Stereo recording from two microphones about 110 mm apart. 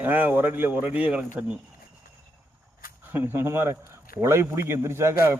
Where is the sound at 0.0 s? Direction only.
15° right (ahead or behind).